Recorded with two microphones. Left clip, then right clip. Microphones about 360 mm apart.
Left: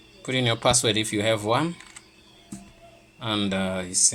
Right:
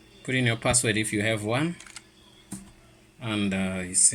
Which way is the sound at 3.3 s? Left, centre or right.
Left.